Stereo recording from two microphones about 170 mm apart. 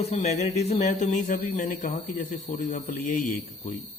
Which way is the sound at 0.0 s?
40° left (ahead or behind).